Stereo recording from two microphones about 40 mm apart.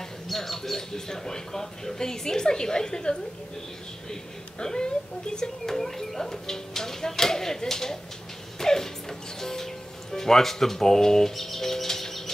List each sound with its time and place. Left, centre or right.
0.3 s speech: centre
8.5 s music: centre
10.1 s speech: centre